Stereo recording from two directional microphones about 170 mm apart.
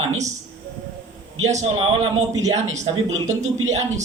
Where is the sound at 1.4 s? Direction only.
40° right (ahead or behind).